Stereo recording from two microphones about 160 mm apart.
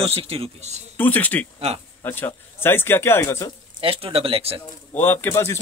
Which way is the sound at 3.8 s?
35° right (ahead or behind).